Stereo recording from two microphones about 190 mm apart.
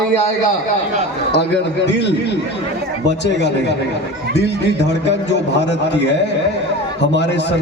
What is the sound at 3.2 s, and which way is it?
A man's voice, 65° left (ahead or behind).